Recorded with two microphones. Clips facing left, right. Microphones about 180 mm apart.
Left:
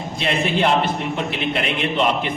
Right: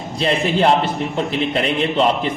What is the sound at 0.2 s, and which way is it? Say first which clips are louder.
Speech: right 3 dB; 35° right (ahead or behind).